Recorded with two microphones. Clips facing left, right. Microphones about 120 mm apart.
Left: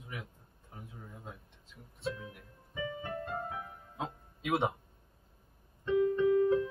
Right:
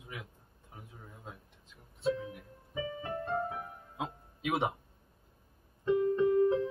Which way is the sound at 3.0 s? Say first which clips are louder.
Right 4 dB; 30° right (ahead or behind).